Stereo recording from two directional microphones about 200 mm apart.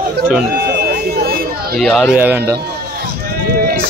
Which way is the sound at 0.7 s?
50° right (ahead or behind).